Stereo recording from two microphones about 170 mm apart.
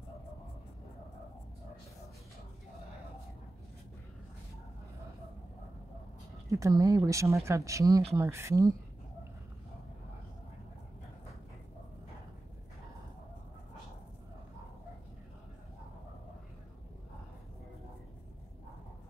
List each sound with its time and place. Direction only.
6.5 s speech: 20° right (ahead or behind)